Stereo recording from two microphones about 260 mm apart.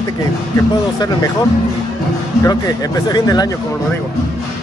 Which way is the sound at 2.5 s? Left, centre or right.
Centre.